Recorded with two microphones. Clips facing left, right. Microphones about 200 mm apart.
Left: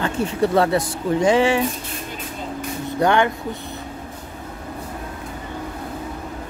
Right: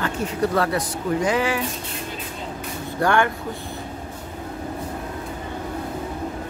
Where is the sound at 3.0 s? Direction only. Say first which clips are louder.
Left 2 dB; 20° left (ahead or behind).